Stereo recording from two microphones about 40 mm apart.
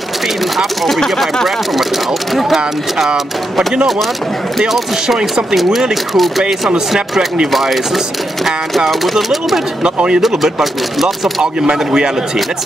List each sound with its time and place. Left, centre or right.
0.8 s speech: centre
5.1 s speech: centre
7.5 s speech: centre
9.8 s speech: right
10.2 s speech: centre